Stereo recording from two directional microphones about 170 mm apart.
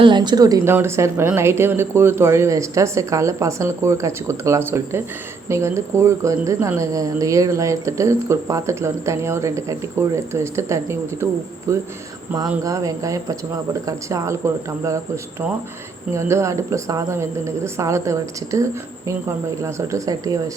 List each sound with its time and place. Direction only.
0.0 s speech: 25° right (ahead or behind)